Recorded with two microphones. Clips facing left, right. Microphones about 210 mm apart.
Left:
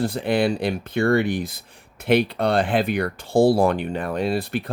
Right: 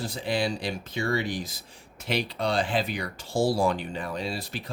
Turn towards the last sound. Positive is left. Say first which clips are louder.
# left 10 dB
turn(degrees=60)  # may be behind; listen again after turning